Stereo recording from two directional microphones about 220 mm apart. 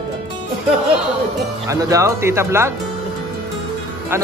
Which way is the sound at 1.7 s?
15° right (ahead or behind).